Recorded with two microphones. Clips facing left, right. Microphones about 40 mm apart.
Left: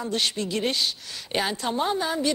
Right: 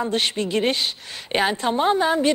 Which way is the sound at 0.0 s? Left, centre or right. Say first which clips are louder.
Right 4 dB; right.